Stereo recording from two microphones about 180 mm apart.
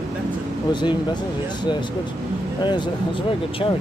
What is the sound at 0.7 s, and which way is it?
Speech, 25° left (ahead or behind).